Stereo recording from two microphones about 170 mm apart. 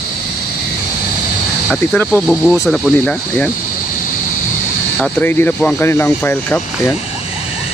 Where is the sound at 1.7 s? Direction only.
5° left (ahead or behind).